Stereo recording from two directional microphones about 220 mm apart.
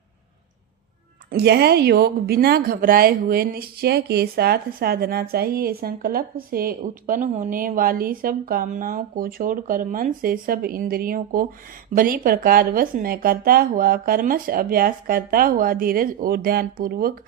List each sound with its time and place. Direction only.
1.3 s a woman's voice: 45° right (ahead or behind)